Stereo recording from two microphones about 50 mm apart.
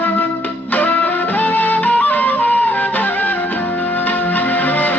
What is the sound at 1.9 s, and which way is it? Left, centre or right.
Music, left.